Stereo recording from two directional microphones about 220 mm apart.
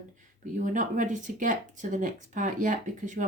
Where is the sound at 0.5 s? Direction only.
35° right (ahead or behind).